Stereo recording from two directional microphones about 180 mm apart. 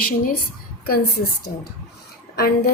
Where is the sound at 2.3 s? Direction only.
60° left (ahead or behind).